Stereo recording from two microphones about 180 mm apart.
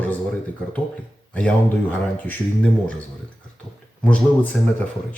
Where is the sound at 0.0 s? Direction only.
5° left (ahead or behind).